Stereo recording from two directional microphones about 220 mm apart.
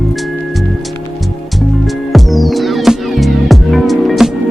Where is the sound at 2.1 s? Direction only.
Centre (ahead or behind).